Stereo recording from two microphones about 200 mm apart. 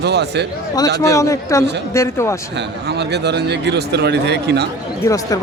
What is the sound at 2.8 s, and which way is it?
Speech, 55° right (ahead or behind).